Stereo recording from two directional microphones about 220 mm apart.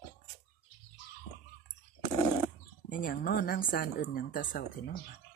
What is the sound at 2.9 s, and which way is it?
Speech, 40° left (ahead or behind).